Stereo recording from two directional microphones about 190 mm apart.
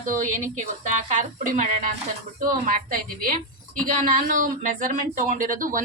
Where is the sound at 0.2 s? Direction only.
45° right (ahead or behind).